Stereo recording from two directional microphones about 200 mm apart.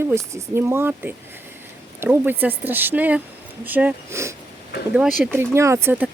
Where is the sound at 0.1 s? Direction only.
15° right (ahead or behind).